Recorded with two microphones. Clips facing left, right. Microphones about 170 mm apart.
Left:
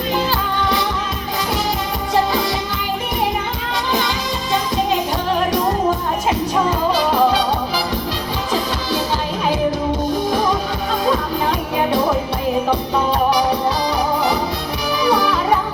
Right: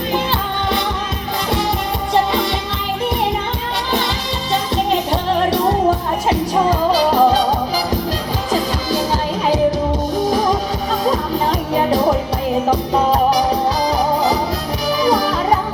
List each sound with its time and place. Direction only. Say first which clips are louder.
0.6 s music: even; 25° right (ahead or behind)
6.2 s music: right 3 dB; 35° right (ahead or behind)
14.8 s music: right 1 dB; 40° right (ahead or behind)